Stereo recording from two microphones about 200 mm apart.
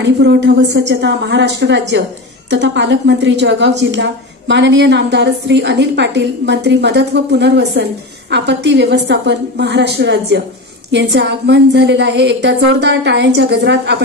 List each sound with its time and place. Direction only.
0.0 s a woman's voice: 60° right (ahead or behind)